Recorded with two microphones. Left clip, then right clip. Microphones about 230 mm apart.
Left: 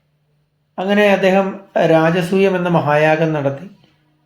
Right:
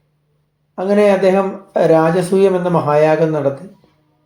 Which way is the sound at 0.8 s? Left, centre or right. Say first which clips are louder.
Right 1 dB; centre.